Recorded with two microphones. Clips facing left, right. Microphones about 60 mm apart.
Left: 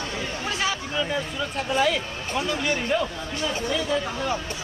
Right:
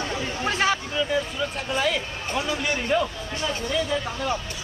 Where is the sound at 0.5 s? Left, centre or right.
Right.